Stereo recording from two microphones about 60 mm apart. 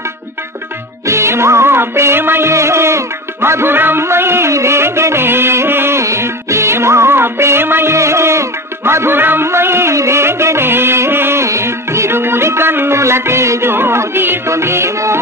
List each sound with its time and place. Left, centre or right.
1.0 s music: right
11.4 s music: right
14.5 s music: right